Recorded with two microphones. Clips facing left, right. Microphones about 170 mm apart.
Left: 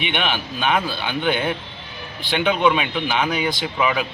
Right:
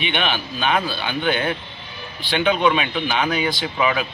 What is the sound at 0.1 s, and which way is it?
A man's voice, 15° left (ahead or behind).